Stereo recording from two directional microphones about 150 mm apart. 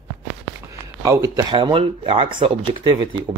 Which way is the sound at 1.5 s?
35° right (ahead or behind).